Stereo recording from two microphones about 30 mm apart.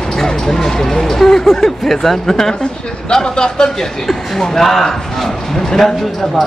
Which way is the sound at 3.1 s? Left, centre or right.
Left.